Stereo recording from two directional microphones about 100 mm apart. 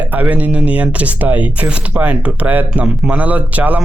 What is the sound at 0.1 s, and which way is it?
Speech, 15° right (ahead or behind).